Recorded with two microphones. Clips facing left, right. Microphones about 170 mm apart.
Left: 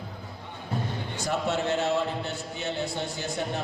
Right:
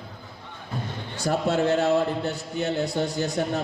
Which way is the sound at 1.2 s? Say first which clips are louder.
Right 5 dB; 35° right (ahead or behind).